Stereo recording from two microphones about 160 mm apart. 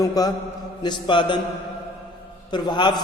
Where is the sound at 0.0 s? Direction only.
25° left (ahead or behind).